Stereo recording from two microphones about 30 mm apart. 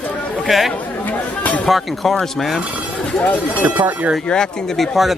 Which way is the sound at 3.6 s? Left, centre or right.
Right.